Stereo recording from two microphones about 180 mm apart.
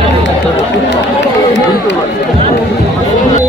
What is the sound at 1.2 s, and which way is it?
Chatter, 80° left.